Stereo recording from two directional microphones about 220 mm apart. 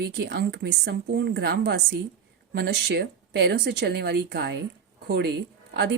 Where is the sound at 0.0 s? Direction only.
50° right (ahead or behind).